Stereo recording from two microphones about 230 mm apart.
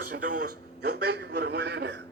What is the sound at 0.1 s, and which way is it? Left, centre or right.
A man's voice, right.